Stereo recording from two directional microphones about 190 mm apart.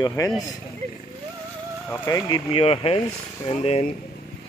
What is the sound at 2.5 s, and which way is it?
Speech, 30° left (ahead or behind).